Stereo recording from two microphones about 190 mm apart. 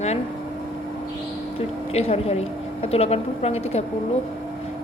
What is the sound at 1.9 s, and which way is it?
Speech, 35° left (ahead or behind).